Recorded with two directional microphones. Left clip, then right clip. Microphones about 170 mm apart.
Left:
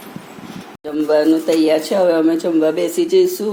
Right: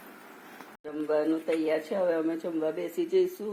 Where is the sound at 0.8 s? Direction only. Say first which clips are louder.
Left 13 dB; 5° left (ahead or behind).